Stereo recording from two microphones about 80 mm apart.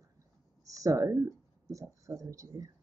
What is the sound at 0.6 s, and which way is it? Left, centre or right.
Speech, right.